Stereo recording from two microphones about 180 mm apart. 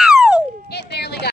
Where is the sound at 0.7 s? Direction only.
65° left (ahead or behind).